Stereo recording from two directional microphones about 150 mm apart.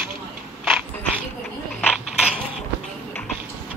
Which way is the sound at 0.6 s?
Centre (ahead or behind).